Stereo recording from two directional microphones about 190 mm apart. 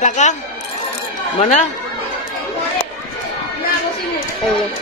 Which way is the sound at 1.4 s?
40° left (ahead or behind).